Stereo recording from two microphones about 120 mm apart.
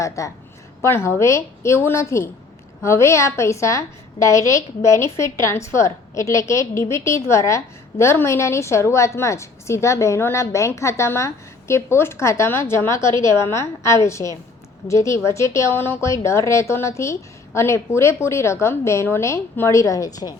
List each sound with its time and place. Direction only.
0.2 s a woman's voice: 25° left (ahead or behind)